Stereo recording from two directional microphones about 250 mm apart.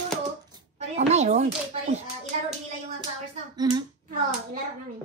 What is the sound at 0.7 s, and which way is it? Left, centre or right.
A child's voice, right.